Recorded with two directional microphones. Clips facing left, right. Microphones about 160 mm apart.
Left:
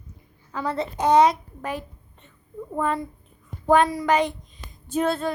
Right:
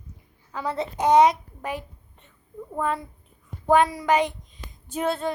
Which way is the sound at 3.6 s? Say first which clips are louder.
Left 1 dB; 10° right (ahead or behind).